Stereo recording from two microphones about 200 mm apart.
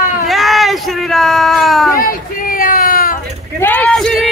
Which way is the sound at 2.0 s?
45° left (ahead or behind).